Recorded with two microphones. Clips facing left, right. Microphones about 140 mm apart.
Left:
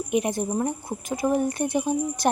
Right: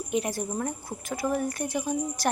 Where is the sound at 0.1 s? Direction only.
20° left (ahead or behind).